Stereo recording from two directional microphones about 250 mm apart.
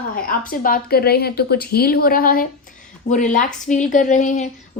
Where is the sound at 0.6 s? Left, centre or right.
Left.